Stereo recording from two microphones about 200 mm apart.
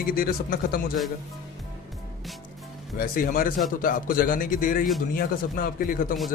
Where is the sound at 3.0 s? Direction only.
45° left (ahead or behind).